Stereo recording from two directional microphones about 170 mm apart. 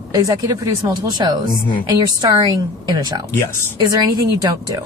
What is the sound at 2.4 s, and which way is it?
A woman's voice, 25° right (ahead or behind).